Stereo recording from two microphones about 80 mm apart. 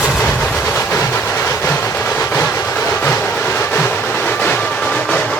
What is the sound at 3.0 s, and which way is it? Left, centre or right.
Train, left.